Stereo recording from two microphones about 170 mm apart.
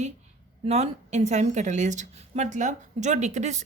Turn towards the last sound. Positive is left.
turn(degrees=-45)  # may be behind; listen again after turning